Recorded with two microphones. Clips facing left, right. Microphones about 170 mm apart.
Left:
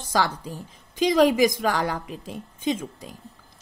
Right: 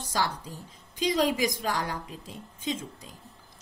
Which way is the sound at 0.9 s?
75° left (ahead or behind).